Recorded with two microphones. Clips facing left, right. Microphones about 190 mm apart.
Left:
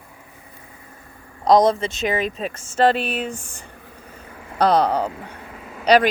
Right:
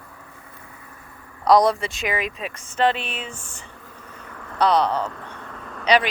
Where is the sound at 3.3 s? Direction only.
15° left (ahead or behind).